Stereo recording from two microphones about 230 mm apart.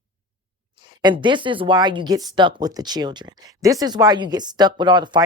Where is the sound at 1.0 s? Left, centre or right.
Centre.